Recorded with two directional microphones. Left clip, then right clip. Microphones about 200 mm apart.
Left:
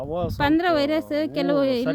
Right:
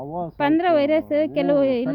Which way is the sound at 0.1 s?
30° left (ahead or behind).